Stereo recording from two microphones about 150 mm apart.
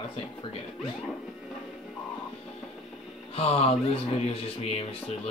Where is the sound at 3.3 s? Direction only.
40° left (ahead or behind).